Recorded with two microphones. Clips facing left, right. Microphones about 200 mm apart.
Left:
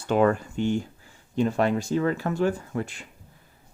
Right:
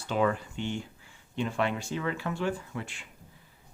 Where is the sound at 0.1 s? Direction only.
50° left (ahead or behind).